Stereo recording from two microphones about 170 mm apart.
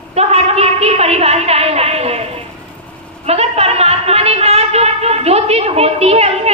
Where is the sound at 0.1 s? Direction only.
40° right (ahead or behind).